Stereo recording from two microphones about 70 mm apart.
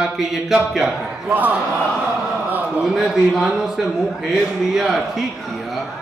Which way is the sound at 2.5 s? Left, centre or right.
Right.